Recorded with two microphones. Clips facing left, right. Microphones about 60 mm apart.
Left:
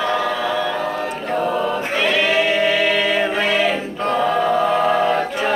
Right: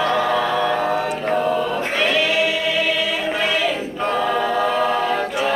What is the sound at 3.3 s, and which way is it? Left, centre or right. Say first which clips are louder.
Music: left 2 dB; left.